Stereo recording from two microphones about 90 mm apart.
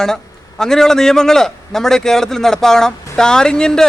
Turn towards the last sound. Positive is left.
turn(degrees=10)  # may be behind; listen again after turning